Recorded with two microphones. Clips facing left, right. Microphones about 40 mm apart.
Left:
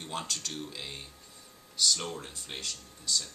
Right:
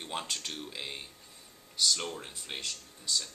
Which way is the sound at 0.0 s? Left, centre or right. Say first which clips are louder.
Even; centre.